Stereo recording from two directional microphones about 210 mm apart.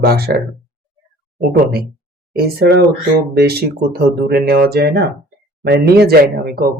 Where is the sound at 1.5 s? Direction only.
50° right (ahead or behind).